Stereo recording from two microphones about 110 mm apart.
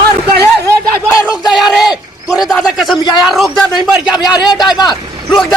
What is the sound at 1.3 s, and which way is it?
A man's voice, 5° right (ahead or behind).